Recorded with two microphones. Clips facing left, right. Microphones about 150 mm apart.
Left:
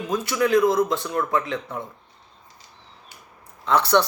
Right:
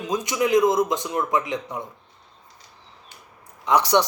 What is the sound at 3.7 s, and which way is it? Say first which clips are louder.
Speech: even; 15° right (ahead or behind).